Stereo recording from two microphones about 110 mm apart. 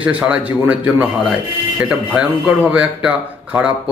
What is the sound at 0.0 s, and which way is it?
Speech, 10° right (ahead or behind).